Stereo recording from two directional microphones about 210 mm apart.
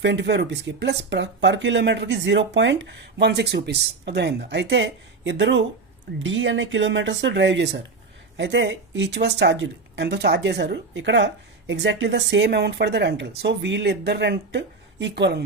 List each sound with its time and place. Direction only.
0.0 s speech: 55° right (ahead or behind)